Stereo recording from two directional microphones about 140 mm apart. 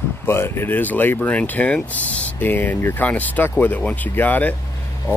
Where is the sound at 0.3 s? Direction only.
15° left (ahead or behind).